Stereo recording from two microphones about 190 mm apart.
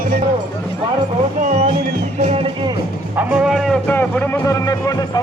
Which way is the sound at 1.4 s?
40° right (ahead or behind).